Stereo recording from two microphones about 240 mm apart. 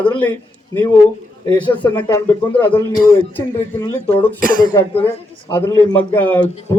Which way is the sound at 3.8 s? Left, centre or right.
Centre.